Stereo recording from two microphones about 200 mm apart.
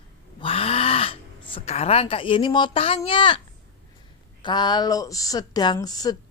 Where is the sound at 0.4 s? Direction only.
30° left (ahead or behind).